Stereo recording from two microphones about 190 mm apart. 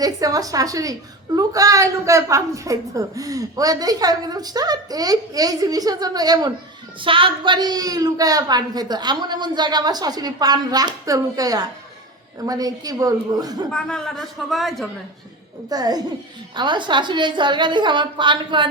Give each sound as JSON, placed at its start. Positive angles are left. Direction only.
{"t": 0.0, "sound": "a woman's voice", "side_deg": -20}
{"t": 13.7, "sound": "a man's voice", "side_deg": 5}
{"t": 15.7, "sound": "a woman's voice", "side_deg": -20}